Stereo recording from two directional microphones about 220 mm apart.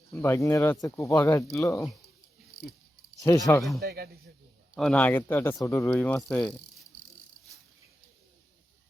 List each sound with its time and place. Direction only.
0.2 s speech: 10° left (ahead or behind)
3.2 s speech: 15° left (ahead or behind)
3.8 s a man's voice: 45° right (ahead or behind)
4.7 s speech: 5° left (ahead or behind)